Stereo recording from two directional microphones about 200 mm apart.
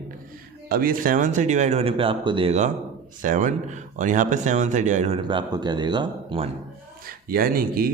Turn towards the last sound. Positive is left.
turn(degrees=-45)  # may be behind; listen again after turning